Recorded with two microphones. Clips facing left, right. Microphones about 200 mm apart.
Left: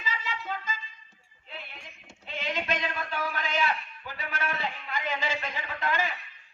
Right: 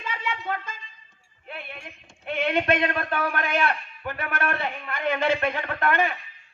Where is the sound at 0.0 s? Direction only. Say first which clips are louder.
Right 5 dB; 60° right (ahead or behind).